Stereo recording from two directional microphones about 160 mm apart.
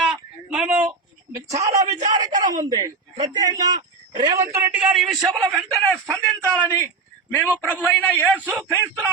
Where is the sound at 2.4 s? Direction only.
25° right (ahead or behind); by 8.4 s 10° left (ahead or behind).